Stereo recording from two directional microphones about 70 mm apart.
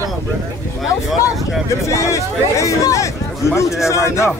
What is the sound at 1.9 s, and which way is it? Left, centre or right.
A man's voice, left.